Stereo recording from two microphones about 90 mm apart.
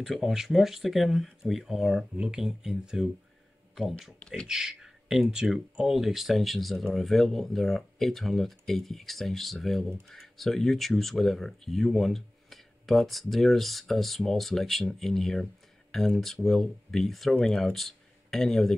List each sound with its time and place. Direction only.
0.0 s speech: centre (ahead or behind)
4.5 s speech: 5° right (ahead or behind)